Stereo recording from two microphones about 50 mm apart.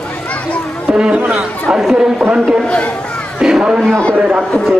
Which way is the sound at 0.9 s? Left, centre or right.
Right.